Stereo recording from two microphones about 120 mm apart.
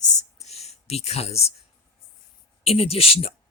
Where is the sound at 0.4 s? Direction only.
65° left (ahead or behind).